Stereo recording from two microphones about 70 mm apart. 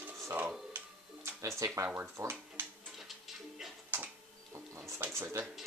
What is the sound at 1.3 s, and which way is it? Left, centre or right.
Speech, right.